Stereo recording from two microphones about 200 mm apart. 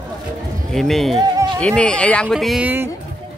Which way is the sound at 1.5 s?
5° left (ahead or behind).